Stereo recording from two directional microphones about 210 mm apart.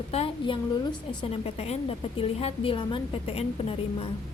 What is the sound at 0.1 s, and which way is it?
A woman's voice, 25° left (ahead or behind).